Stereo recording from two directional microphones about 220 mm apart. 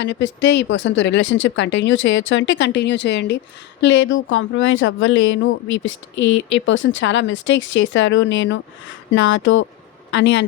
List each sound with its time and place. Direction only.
0.0 s speech: 55° left (ahead or behind)